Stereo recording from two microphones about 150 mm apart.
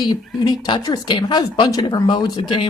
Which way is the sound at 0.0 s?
25° left (ahead or behind).